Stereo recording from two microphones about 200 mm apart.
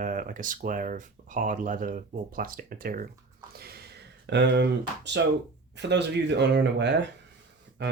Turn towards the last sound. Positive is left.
turn(degrees=-55)  # may be behind; listen again after turning